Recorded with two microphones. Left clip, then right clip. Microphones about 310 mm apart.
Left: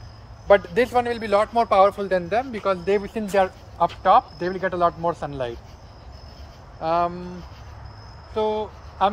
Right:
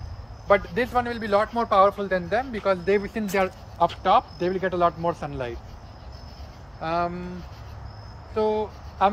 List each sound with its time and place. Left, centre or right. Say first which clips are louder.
0.5 s a man's voice: left 4 dB; left
6.8 s a man's voice: left 4 dB; left
8.4 s speech: even; left